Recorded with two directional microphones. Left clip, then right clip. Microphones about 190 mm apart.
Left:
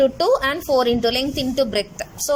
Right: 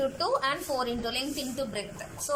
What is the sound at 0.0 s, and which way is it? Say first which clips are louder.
A woman's voice: left 11 dB; 40° left (ahead or behind).